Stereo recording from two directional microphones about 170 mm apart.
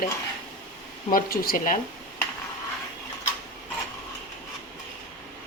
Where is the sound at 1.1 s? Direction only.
60° left (ahead or behind).